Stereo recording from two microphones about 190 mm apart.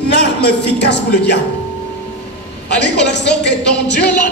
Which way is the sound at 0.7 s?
65° left (ahead or behind).